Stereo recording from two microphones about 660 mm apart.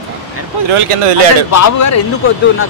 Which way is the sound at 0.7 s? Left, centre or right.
Right.